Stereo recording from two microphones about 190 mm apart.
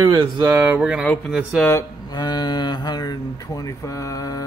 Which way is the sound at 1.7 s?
20° left (ahead or behind).